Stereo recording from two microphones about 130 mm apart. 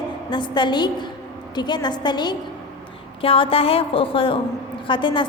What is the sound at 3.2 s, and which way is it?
A woman's voice, 45° left (ahead or behind).